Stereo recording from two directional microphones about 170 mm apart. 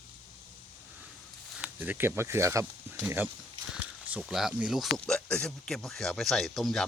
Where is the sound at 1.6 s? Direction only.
10° right (ahead or behind).